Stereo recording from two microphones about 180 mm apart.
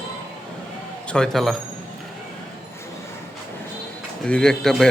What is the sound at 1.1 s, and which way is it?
Speech, centre (ahead or behind).